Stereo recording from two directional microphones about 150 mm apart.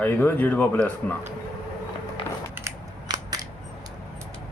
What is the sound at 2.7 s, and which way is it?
Cap gun, 25° right (ahead or behind).